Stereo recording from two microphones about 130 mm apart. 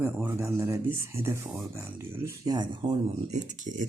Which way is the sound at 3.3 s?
75° right (ahead or behind).